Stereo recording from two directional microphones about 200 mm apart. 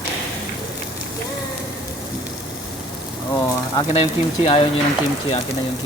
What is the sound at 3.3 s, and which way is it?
Speech, 20° left (ahead or behind).